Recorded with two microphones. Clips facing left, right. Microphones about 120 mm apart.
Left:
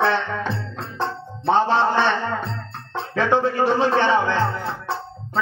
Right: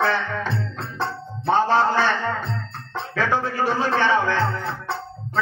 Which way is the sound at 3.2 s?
20° left (ahead or behind).